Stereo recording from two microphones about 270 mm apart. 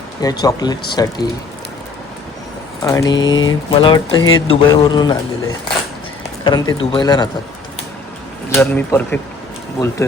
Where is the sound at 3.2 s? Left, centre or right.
Left.